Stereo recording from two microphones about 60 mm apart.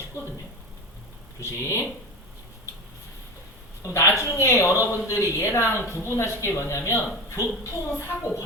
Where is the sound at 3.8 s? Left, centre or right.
Left.